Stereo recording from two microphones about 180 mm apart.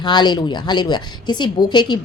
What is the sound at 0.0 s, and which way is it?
A woman's voice, 25° left (ahead or behind).